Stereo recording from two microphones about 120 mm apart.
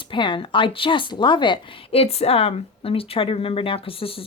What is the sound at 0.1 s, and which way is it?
A woman's voice, 45° left (ahead or behind).